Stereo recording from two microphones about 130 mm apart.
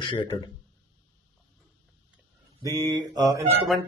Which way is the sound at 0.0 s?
40° left (ahead or behind).